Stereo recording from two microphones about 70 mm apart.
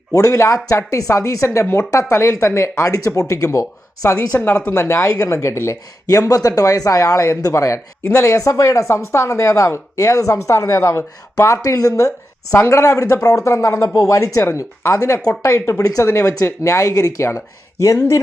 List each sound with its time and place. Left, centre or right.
0.1 s speech: left
1.5 s speech: left
1.9 s speech: left